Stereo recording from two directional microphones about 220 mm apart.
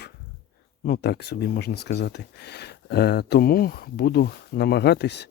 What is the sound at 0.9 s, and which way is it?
Speech, 45° left (ahead or behind).